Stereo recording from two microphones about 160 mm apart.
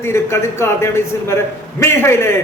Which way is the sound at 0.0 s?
15° left (ahead or behind).